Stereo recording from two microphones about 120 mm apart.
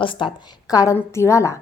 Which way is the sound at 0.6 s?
30° left (ahead or behind).